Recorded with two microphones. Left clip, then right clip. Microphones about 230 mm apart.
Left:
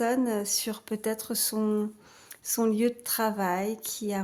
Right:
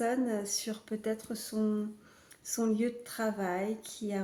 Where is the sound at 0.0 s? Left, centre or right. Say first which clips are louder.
Left 5 dB; left.